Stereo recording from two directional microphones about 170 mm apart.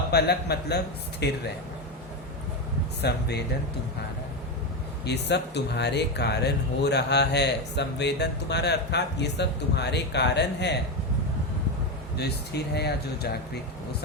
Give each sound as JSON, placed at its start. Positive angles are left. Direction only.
{"t": 0.1, "sound": "speech", "side_deg": 75}
{"t": 3.0, "sound": "speech", "side_deg": 75}
{"t": 5.0, "sound": "speech", "side_deg": 80}
{"t": 12.1, "sound": "speech", "side_deg": 75}